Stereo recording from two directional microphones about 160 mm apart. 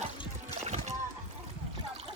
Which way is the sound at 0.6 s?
45° right (ahead or behind).